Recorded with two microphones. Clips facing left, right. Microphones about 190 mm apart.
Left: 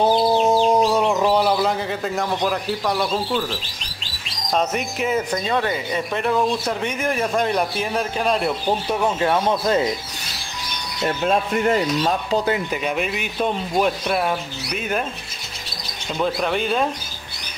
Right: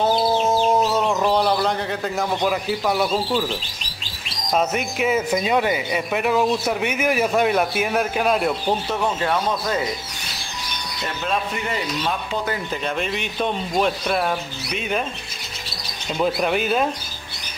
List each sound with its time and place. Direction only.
0.0 s chicken: 15° left (ahead or behind)
1.0 s a man's voice: 5° left (ahead or behind)
4.5 s speech: 5° right (ahead or behind)
8.8 s speech: 15° left (ahead or behind)
11.2 s speech: 50° left (ahead or behind)
12.8 s speech: 5° left (ahead or behind)
16.2 s speech: 10° right (ahead or behind)